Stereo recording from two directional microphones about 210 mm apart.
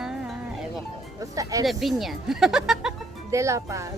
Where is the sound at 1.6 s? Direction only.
Centre (ahead or behind).